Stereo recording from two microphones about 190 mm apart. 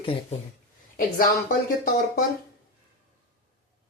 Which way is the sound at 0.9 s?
45° left (ahead or behind).